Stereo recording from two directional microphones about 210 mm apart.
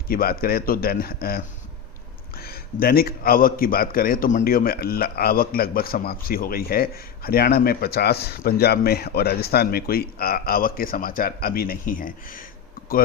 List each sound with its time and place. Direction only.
0.1 s a man's voice: 45° left (ahead or behind)